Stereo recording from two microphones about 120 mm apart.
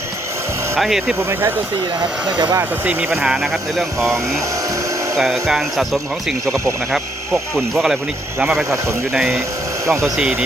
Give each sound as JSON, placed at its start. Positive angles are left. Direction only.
{"t": 0.8, "sound": "speech", "side_deg": -5}
{"t": 1.2, "sound": "speech", "side_deg": -20}
{"t": 5.1, "sound": "speech", "side_deg": 0}
{"t": 7.7, "sound": "speech", "side_deg": -5}
{"t": 9.8, "sound": "speech", "side_deg": -25}
{"t": 10.2, "sound": "speech", "side_deg": -5}